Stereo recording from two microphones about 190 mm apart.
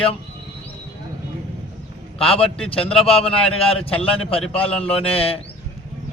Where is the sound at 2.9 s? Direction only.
30° left (ahead or behind).